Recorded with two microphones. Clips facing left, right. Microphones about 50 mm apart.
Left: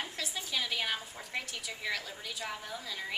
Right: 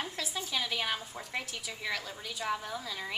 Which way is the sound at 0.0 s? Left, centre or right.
Centre.